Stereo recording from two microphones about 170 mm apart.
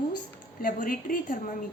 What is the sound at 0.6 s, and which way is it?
Speech, 55° left (ahead or behind).